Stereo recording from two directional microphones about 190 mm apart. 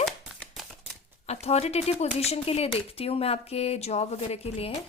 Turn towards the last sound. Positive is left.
turn(degrees=30)  # may be behind; listen again after turning